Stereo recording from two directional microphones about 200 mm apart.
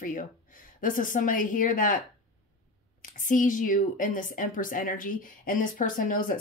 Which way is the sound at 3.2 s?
40° left (ahead or behind).